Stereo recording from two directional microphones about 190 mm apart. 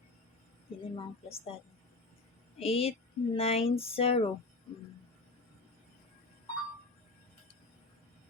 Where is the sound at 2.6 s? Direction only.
30° left (ahead or behind).